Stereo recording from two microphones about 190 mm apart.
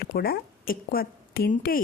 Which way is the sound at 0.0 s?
55° left (ahead or behind).